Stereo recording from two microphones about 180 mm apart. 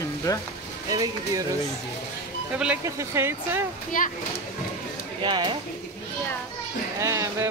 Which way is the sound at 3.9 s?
50° left (ahead or behind).